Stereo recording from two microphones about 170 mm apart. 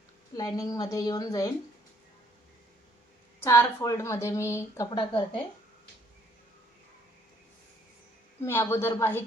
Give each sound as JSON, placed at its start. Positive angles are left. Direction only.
{"t": 0.3, "sound": "a woman's voice", "side_deg": 20}
{"t": 3.4, "sound": "a woman's voice", "side_deg": 15}
{"t": 4.9, "sound": "a woman's voice", "side_deg": 30}
{"t": 8.4, "sound": "a woman's voice", "side_deg": 15}